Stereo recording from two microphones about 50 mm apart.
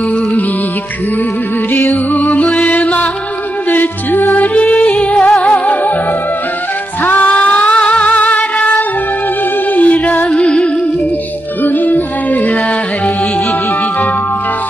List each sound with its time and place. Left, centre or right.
1.7 s music: left
5.1 s music: centre
5.4 s music: left
7.1 s music: left
11.6 s music: left